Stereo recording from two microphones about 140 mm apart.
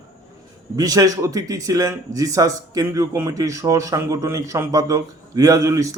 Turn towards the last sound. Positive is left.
turn(degrees=-25)  # may be behind; listen again after turning